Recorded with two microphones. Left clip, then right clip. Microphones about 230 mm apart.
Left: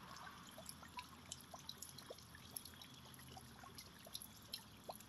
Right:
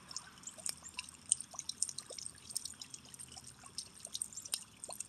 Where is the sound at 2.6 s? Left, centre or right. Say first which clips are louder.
Right 15 dB; centre.